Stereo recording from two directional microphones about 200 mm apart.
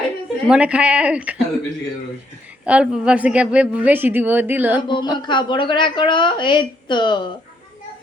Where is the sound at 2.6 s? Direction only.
5° right (ahead or behind).